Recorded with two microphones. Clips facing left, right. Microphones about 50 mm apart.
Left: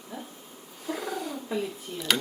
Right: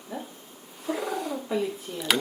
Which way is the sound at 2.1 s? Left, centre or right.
Centre.